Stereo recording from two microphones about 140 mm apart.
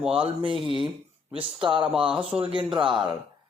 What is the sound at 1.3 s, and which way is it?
Speech, 40° right (ahead or behind).